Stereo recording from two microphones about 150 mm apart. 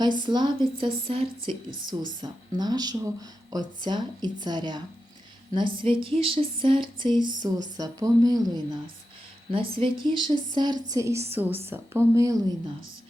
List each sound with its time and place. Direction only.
0.2 s a woman's voice: 30° right (ahead or behind)